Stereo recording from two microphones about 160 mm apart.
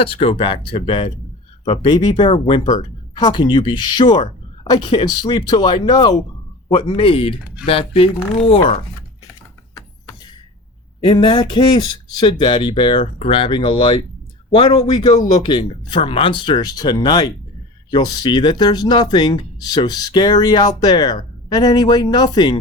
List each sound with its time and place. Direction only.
0.0 s speech: 35° left (ahead or behind)
11.0 s speech: 30° left (ahead or behind)